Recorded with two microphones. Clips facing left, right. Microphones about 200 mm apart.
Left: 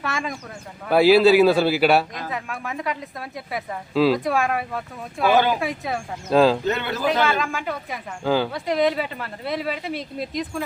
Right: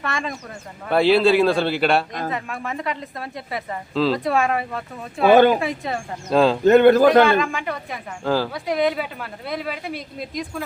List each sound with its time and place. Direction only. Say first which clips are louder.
0.0 s speech: right 1 dB; centre (ahead or behind)
5.3 s a man's voice: right 6 dB; 55° right (ahead or behind)
5.5 s speech: right 1 dB; centre (ahead or behind)
6.7 s a man's voice: right 11 dB; 50° right (ahead or behind)
7.3 s speech: right 4 dB; centre (ahead or behind)